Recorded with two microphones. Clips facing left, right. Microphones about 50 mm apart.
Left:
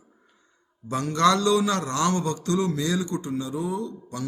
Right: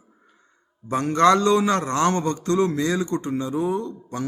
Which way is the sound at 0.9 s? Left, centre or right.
Right.